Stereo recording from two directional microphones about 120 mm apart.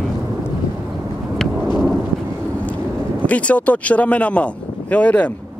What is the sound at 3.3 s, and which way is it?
Speech, 10° left (ahead or behind).